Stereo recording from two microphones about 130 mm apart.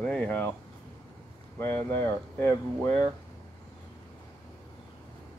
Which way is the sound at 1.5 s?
20° left (ahead or behind).